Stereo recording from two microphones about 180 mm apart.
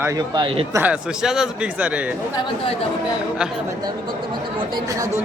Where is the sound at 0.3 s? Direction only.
25° right (ahead or behind).